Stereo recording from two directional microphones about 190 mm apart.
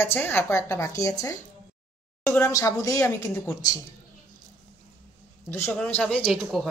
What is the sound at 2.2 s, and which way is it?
Speech, 10° left (ahead or behind).